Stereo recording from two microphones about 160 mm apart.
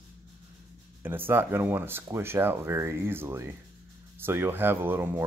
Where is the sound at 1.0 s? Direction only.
15° right (ahead or behind).